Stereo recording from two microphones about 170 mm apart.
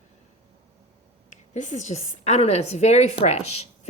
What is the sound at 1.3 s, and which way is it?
A woman's voice, 45° left (ahead or behind).